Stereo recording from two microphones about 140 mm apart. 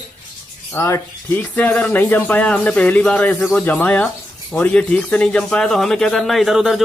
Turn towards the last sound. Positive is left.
turn(degrees=0)  # may be behind; listen again after turning